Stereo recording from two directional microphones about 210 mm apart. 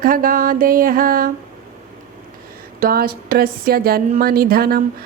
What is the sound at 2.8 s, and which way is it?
Speech, 45° right (ahead or behind).